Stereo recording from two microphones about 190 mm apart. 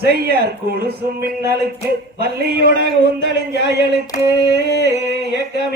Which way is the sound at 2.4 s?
55° right (ahead or behind).